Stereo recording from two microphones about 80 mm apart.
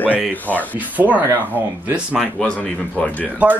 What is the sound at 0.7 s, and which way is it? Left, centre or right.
Speech, centre.